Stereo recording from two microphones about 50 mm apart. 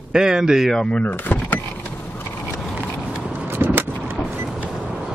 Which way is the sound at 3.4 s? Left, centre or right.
Right.